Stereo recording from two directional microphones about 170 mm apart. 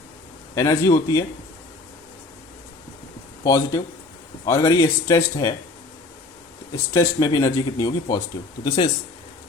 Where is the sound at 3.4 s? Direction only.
20° left (ahead or behind).